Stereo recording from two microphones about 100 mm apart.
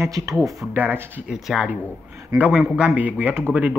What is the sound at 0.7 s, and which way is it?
Speech, 20° right (ahead or behind).